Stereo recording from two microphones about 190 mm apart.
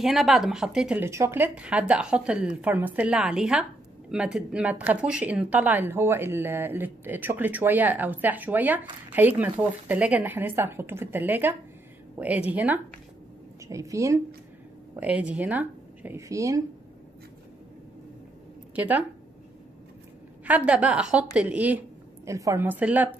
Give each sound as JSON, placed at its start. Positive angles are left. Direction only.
{"t": 0.0, "sound": "speech", "side_deg": 0}
{"t": 18.8, "sound": "speech", "side_deg": -10}
{"t": 20.4, "sound": "speech", "side_deg": -5}